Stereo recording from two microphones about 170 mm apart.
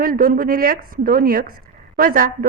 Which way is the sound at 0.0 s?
60° right (ahead or behind).